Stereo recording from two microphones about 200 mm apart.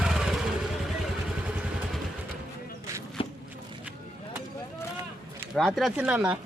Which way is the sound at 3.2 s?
25° left (ahead or behind).